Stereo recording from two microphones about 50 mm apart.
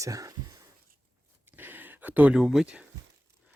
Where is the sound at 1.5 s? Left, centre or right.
Right.